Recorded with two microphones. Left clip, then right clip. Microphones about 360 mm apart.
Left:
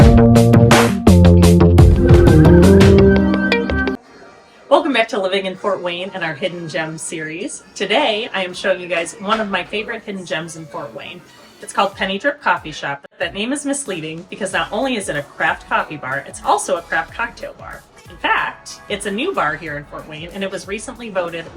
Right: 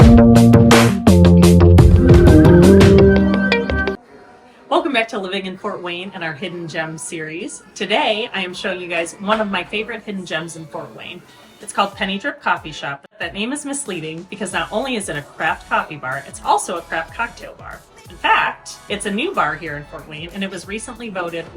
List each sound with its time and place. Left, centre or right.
0.0 s music: centre
4.7 s a sound: centre
5.8 s a woman's voice: centre
11.7 s a woman's voice: centre
18.9 s a woman's voice: centre